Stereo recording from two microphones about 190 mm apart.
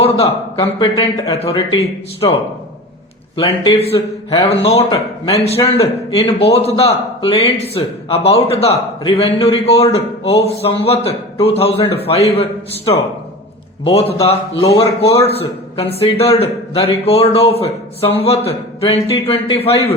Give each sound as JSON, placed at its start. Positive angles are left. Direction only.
{"t": 0.0, "sound": "speech", "side_deg": 30}